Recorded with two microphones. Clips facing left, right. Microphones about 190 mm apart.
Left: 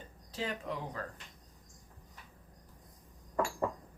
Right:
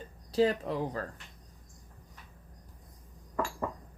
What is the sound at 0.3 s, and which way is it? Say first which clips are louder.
Speech: right 11 dB; 35° right (ahead or behind).